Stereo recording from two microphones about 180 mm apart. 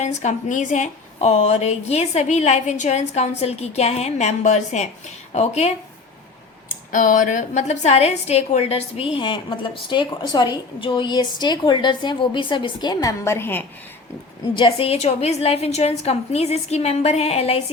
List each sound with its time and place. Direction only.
0.0 s a woman's voice: 40° left (ahead or behind)
6.9 s a woman's voice: 45° left (ahead or behind); by 13.7 s 10° left (ahead or behind)
14.5 s a woman's voice: 30° left (ahead or behind)